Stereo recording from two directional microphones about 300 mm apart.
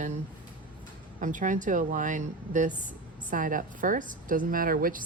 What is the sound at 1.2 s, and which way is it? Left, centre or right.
A woman's voice, right.